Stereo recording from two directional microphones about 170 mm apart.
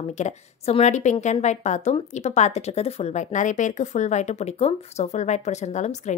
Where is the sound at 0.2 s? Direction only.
40° left (ahead or behind).